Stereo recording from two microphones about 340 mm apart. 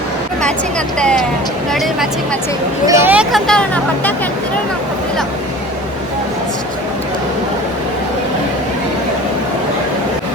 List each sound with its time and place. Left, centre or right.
0.9 s speech: centre